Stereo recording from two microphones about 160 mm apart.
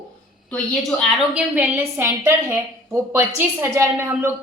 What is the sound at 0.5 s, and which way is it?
Speech, 5° left (ahead or behind).